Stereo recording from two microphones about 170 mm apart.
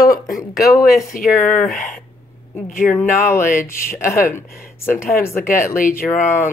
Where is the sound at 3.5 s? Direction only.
15° left (ahead or behind).